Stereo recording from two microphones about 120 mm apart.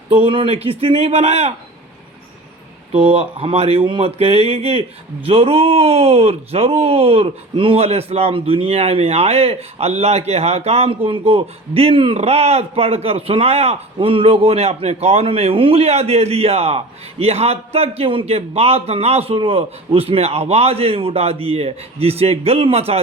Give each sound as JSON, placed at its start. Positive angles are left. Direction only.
{"t": 0.3, "sound": "speech", "side_deg": -50}
{"t": 2.9, "sound": "speech", "side_deg": -50}